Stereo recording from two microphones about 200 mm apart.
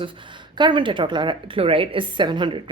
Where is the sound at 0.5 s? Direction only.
25° right (ahead or behind).